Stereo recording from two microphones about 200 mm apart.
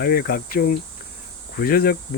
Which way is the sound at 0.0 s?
50° left (ahead or behind).